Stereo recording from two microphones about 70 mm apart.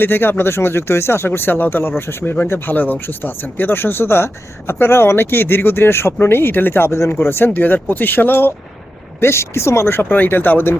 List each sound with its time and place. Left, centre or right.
0.0 s speech: left
9.2 s speech: left